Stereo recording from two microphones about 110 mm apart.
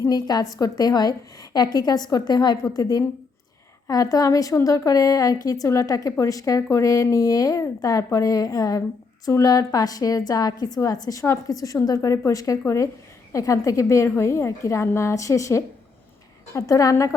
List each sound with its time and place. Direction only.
0.0 s a woman's voice: 40° left (ahead or behind)